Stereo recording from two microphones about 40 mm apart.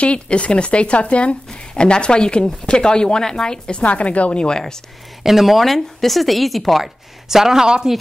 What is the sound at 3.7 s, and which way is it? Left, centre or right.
Speech, left.